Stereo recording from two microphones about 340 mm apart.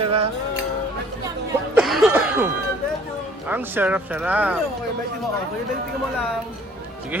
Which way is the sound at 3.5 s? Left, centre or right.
Centre.